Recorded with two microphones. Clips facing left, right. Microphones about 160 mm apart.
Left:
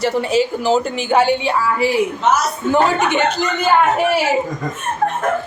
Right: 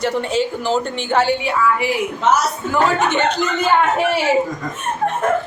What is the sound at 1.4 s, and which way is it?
Speech, 35° left (ahead or behind).